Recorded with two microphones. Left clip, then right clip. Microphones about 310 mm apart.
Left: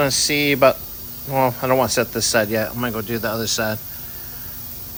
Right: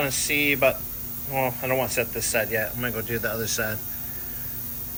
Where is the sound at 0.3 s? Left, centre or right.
Left.